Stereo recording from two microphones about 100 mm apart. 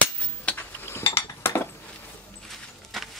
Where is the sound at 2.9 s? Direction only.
Centre (ahead or behind).